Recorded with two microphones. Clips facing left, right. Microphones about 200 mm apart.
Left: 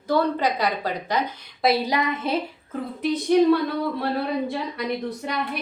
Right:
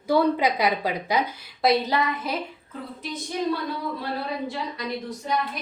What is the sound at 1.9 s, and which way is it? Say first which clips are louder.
Speech: left 1 dB; 20° left (ahead or behind).